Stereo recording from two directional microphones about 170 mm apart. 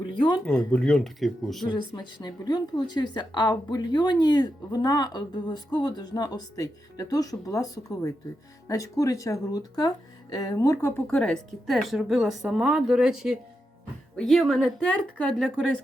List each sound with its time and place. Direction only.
0.4 s a woman's voice: 10° left (ahead or behind)
1.7 s a woman's voice: 25° left (ahead or behind); by 15.8 s 5° left (ahead or behind)